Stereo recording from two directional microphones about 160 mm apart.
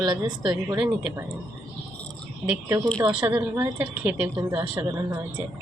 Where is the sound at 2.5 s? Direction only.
15° right (ahead or behind).